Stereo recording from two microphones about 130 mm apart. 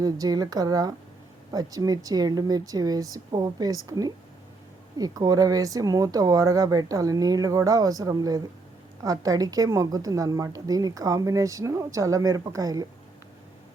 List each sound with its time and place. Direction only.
0.0 s a woman's voice: 30° right (ahead or behind)